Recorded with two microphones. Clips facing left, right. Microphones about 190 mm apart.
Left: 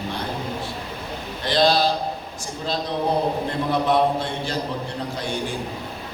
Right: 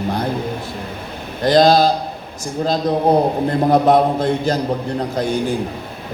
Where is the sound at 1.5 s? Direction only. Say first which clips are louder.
Right 7 dB; 45° right (ahead or behind).